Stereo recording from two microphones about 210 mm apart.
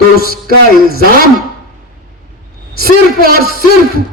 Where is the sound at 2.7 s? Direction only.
45° right (ahead or behind).